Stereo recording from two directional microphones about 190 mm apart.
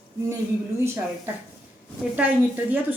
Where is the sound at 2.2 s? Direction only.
10° right (ahead or behind).